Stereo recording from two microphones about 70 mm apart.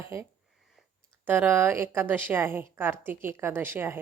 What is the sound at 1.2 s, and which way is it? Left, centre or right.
A woman's voice, right.